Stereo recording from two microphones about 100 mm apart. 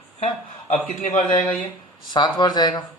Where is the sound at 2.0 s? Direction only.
45° left (ahead or behind).